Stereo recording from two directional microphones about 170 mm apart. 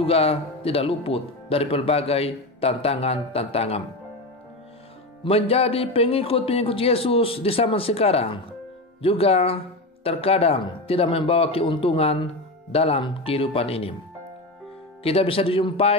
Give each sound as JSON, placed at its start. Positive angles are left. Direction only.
{"t": 0.0, "sound": "speech", "side_deg": 35}
{"t": 5.2, "sound": "speech", "side_deg": 35}
{"t": 15.0, "sound": "speech", "side_deg": 35}